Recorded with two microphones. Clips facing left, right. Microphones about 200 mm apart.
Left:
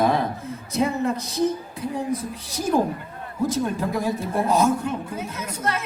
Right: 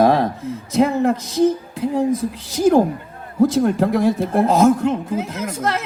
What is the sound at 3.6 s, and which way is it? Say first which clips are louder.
A woman's voice: right 8 dB; 75° right (ahead or behind).